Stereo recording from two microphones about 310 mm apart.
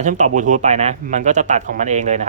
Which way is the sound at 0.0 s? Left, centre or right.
Right.